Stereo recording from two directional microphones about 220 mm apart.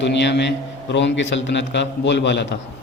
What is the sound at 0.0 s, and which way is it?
A man's voice, 50° left (ahead or behind).